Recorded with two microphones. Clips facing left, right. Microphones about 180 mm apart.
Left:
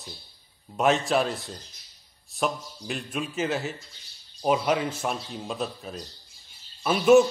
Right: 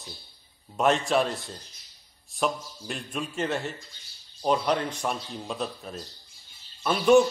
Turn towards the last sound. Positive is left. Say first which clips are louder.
# left 2 dB
turn(degrees=5)  # may be behind; listen again after turning